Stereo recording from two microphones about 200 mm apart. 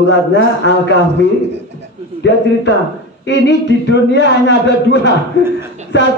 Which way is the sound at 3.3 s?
60° left (ahead or behind).